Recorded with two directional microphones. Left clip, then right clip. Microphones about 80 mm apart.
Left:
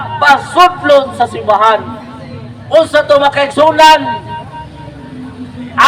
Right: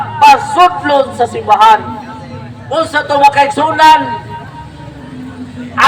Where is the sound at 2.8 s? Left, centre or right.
Left.